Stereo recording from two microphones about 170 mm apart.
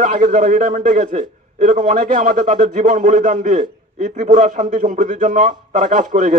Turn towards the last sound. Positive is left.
turn(degrees=-50)  # may be behind; listen again after turning